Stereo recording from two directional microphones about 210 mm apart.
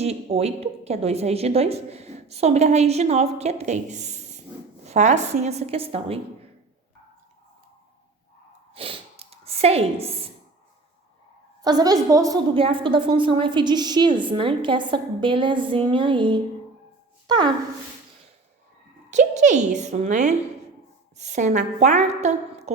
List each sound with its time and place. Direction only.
0.0 s a woman's voice: 30° right (ahead or behind)
8.7 s a sound: 25° right (ahead or behind)
11.6 s a woman's voice: 20° right (ahead or behind)
19.1 s a woman's voice: 35° right (ahead or behind)